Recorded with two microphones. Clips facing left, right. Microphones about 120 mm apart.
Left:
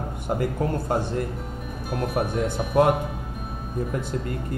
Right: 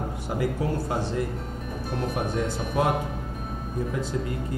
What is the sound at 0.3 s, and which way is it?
Speech, 50° left (ahead or behind).